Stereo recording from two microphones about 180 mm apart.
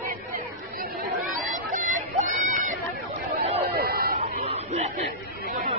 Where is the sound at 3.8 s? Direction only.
60° right (ahead or behind).